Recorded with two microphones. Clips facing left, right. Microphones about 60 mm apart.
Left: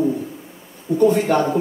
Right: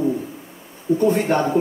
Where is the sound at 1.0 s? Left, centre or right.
Right.